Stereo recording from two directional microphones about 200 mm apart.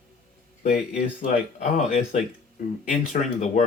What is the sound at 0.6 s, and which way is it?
Speech, 40° left (ahead or behind).